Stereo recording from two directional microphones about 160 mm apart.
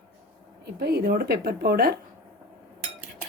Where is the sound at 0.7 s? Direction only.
85° right.